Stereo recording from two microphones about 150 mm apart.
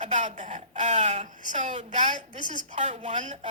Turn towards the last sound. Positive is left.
turn(degrees=-40)  # may be behind; listen again after turning